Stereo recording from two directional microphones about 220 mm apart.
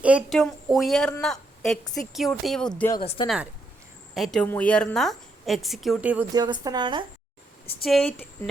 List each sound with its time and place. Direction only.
0.0 s a woman's voice: 5° right (ahead or behind)
4.1 s a woman's voice: centre (ahead or behind)
6.3 s a woman's voice: 20° right (ahead or behind)
7.9 s a woman's voice: centre (ahead or behind)